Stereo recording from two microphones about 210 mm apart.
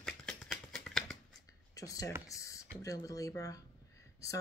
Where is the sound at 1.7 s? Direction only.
15° left (ahead or behind).